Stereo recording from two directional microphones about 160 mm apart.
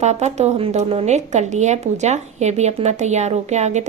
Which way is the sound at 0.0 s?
45° right (ahead or behind).